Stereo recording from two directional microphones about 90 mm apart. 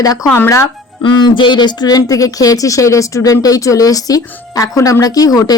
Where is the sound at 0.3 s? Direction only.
30° left (ahead or behind).